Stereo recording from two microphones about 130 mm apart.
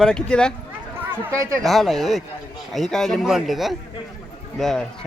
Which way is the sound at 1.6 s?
Centre (ahead or behind).